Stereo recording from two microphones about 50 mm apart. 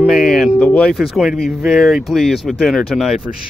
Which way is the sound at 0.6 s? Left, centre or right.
Left.